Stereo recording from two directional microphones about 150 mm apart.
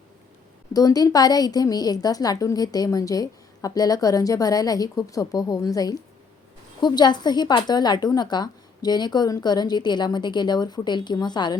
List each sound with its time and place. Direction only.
0.7 s a woman's voice: 25° left (ahead or behind)